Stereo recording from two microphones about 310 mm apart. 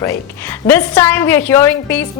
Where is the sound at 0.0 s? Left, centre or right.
Centre.